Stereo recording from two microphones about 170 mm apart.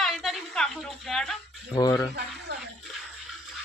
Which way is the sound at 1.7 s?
20° left (ahead or behind).